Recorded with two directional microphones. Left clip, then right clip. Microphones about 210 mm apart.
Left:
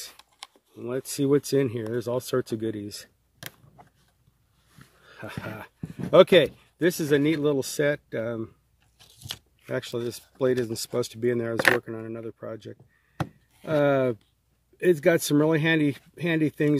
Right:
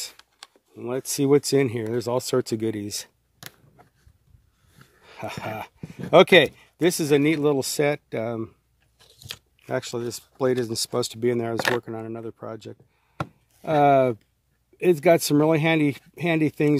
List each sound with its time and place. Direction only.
0.1 s a sound: 10° left (ahead or behind)
0.7 s speech: 35° right (ahead or behind)
5.0 s speech: 40° right (ahead or behind)
8.9 s biting: 10° left (ahead or behind)
9.7 s speech: 30° right (ahead or behind)